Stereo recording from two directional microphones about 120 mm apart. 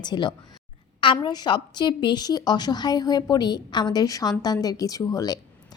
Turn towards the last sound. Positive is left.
turn(degrees=30)  # may be behind; listen again after turning